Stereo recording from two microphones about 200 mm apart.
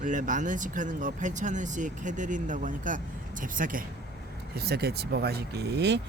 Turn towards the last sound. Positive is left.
turn(degrees=-55)  # may be behind; listen again after turning